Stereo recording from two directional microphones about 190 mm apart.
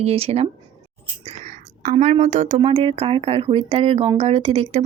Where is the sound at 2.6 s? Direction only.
30° right (ahead or behind).